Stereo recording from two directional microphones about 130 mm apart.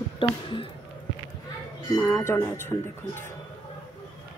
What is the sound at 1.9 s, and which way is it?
Speech, 20° left (ahead or behind).